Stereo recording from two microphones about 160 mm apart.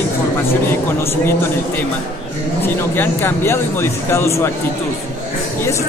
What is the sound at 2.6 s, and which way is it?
Speech, 15° left (ahead or behind).